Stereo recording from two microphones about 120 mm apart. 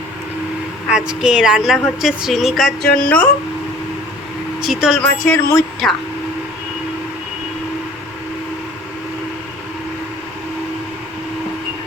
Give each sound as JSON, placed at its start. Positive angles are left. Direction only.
{"t": 0.9, "sound": "a woman's voice", "side_deg": -5}
{"t": 4.6, "sound": "a woman's voice", "side_deg": -5}
{"t": 5.2, "sound": "speech", "side_deg": 20}
{"t": 5.8, "sound": "a woman's voice", "side_deg": 0}